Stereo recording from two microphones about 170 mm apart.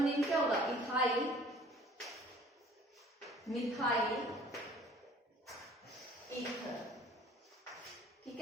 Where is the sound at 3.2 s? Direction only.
Centre (ahead or behind).